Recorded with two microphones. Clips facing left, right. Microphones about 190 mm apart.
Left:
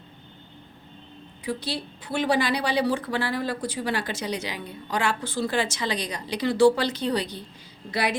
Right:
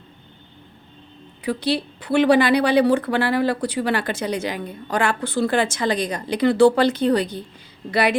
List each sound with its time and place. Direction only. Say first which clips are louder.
1.5 s a woman's voice: right 8 dB; 65° right (ahead or behind); by 7.3 s 50° right (ahead or behind)
7.9 s a woman's voice: right 7 dB; 65° right (ahead or behind)